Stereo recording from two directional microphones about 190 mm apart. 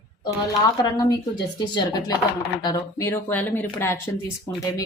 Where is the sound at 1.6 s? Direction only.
20° left (ahead or behind).